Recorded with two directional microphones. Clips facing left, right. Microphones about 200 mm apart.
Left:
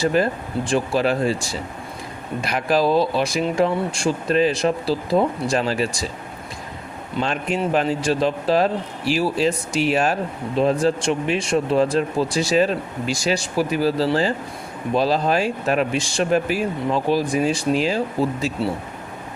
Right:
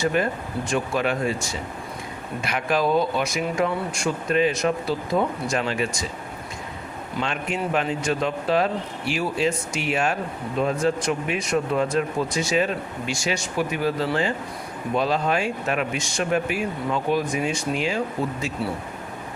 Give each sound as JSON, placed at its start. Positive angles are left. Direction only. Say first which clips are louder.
{"t": 0.0, "sound": "speech", "louder": "left 3 dB", "side_deg": 35}
{"t": 7.2, "sound": "speech", "louder": "left 4 dB", "side_deg": 35}